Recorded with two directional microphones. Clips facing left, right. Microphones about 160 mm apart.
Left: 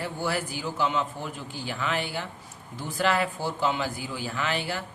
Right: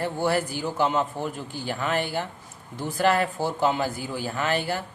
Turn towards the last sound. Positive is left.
turn(degrees=-45)  # may be behind; listen again after turning